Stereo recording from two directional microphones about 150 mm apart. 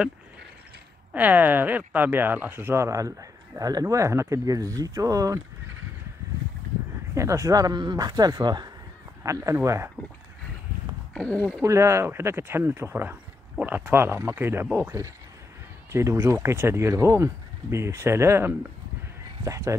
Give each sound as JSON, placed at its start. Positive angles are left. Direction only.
{"t": 1.1, "sound": "speech", "side_deg": -10}
{"t": 7.2, "sound": "speech", "side_deg": -20}
{"t": 11.1, "sound": "speech", "side_deg": 5}
{"t": 11.6, "sound": "speech", "side_deg": -20}